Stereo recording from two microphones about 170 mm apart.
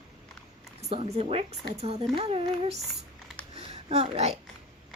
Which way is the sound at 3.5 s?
40° right (ahead or behind).